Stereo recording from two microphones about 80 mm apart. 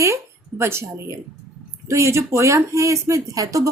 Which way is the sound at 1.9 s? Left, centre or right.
Right.